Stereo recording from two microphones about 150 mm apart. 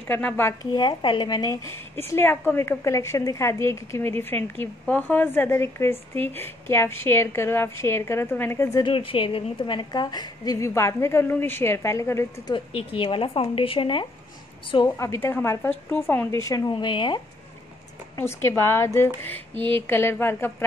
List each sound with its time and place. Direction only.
0.1 s a woman's voice: 10° left (ahead or behind)
0.7 s a woman's voice: 30° left (ahead or behind)
8.8 s a woman's voice: 35° left (ahead or behind); by 12.5 s 20° left (ahead or behind)
12.5 s a woman's voice: 35° left (ahead or behind)
15.0 s a woman's voice: 20° left (ahead or behind)
18.1 s a woman's voice: 15° left (ahead or behind)